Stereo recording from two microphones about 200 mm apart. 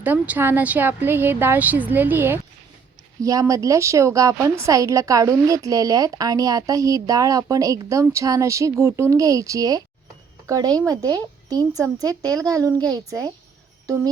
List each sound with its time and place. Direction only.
0.0 s a woman's voice: 10° right (ahead or behind)
13.8 s music: 15° right (ahead or behind)